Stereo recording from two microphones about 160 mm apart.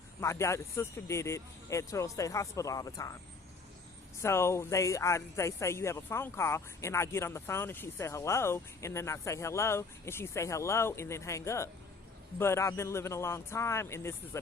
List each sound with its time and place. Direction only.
0.2 s speech: 15° left (ahead or behind)
4.2 s speech: 15° left (ahead or behind)